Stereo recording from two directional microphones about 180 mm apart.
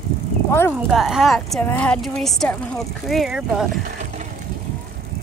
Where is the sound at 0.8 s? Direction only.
Centre (ahead or behind).